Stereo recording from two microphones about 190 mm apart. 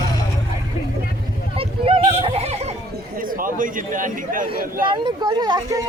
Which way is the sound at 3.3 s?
45° right (ahead or behind).